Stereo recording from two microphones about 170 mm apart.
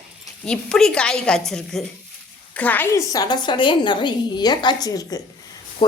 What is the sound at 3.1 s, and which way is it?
A woman's voice, 25° left (ahead or behind).